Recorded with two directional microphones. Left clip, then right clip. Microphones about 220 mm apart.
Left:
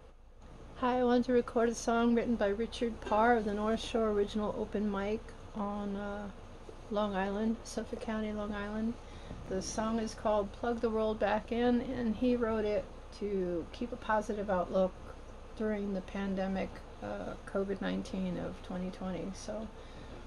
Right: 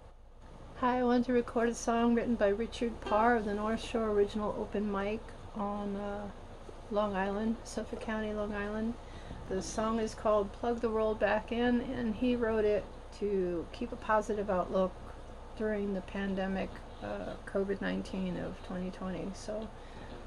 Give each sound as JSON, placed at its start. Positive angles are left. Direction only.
{"t": 0.7, "sound": "speech", "side_deg": 5}